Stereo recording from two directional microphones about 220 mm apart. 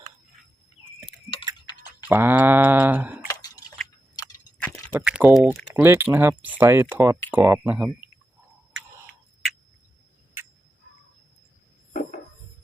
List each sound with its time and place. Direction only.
2.0 s speech: 10° right (ahead or behind)
3.2 s drip: 15° left (ahead or behind)
4.9 s speech: 5° right (ahead or behind)